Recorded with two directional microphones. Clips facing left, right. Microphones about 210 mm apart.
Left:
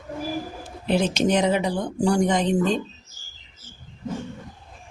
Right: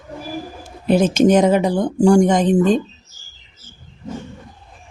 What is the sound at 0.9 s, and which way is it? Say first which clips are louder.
Speech: right 7 dB; 45° right (ahead or behind).